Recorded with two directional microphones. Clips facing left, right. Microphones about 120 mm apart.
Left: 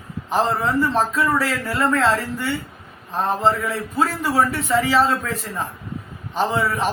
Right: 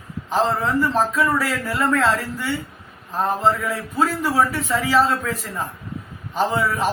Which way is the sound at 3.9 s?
Centre (ahead or behind).